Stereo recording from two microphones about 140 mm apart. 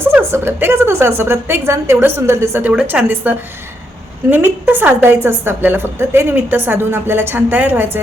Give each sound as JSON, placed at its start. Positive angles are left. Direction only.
{"t": 0.1, "sound": "a woman's voice", "side_deg": -15}